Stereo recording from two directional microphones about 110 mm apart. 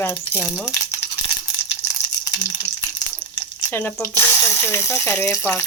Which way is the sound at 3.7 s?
15° left (ahead or behind).